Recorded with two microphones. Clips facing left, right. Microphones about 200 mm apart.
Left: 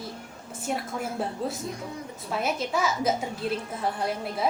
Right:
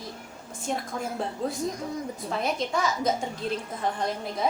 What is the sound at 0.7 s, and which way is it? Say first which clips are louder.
A woman's voice: even; 5° left (ahead or behind).